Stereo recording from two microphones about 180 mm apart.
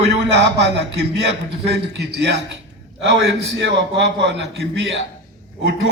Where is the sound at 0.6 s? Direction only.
70° right (ahead or behind).